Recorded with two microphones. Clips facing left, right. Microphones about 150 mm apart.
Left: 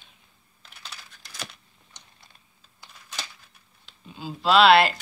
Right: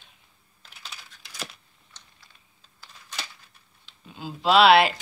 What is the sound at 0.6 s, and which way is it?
Coin, centre (ahead or behind).